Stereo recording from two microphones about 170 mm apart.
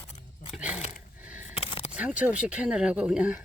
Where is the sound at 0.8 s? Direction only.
40° left (ahead or behind).